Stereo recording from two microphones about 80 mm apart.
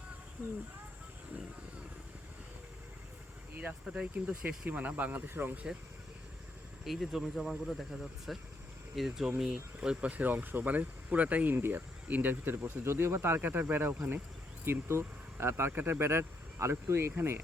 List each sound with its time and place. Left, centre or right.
3.6 s speech: centre
6.8 s speech: centre; by 17.4 s right